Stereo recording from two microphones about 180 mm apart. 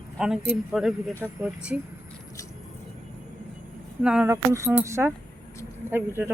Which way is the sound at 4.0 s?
5° right (ahead or behind).